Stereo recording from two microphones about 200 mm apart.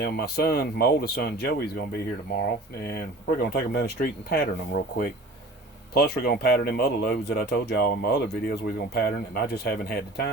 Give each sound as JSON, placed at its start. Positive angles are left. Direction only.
{"t": 0.0, "sound": "speech", "side_deg": 50}
{"t": 3.4, "sound": "speech", "side_deg": 50}